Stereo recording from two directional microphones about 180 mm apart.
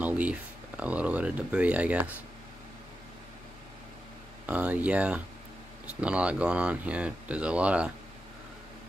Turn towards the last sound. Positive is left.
turn(degrees=-5)  # may be behind; listen again after turning